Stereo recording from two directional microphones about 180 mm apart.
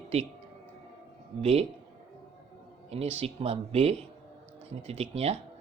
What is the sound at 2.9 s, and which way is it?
Speech, 35° right (ahead or behind).